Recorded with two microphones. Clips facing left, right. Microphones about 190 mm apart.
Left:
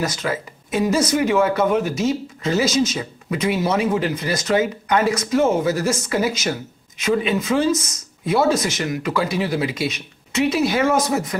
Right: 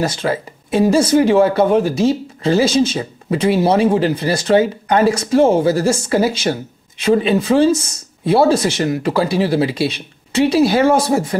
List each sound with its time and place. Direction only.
0.0 s speech: 30° right (ahead or behind)